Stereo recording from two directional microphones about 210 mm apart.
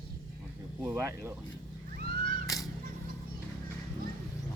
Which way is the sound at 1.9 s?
45° right (ahead or behind).